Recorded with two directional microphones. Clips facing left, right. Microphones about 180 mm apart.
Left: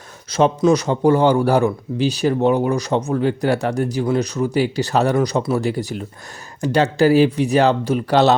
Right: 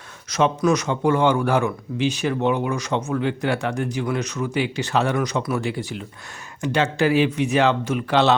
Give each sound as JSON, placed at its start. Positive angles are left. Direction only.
{"t": 0.3, "sound": "a man's voice", "side_deg": 30}